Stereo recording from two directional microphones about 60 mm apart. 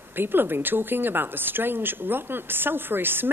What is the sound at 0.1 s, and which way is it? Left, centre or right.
Speech, right.